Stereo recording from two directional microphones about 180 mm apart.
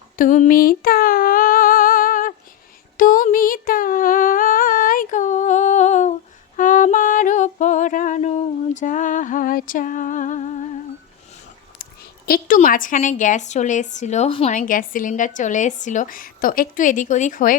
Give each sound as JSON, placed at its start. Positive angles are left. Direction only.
{"t": 0.2, "sound": "humming", "side_deg": 50}
{"t": 6.6, "sound": "a sound", "side_deg": 45}
{"t": 12.2, "sound": "a woman's voice", "side_deg": 50}
{"t": 14.5, "sound": "a woman's voice", "side_deg": 50}